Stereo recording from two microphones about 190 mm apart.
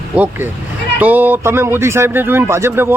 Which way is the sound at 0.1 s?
5° right (ahead or behind).